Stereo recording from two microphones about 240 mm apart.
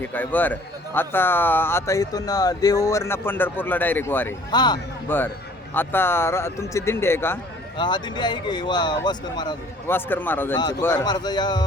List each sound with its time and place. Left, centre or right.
0.0 s a man's voice: centre